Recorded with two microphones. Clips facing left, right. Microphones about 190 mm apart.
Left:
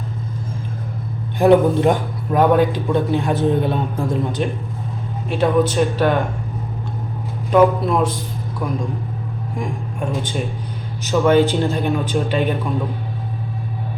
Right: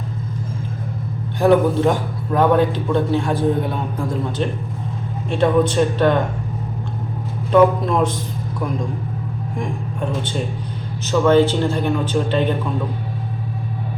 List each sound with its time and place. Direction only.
1.4 s a man's voice: 20° left (ahead or behind)
5.3 s a man's voice: 5° left (ahead or behind)
7.5 s a man's voice: 5° left (ahead or behind)
10.1 s a man's voice: 10° left (ahead or behind)